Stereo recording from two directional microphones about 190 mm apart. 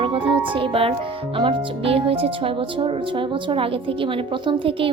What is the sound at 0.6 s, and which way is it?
Speech, 30° right (ahead or behind).